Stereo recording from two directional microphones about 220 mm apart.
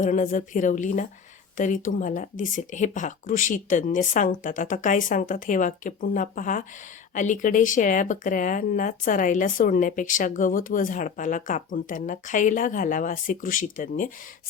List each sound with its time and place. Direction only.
0.0 s speech: 35° left (ahead or behind)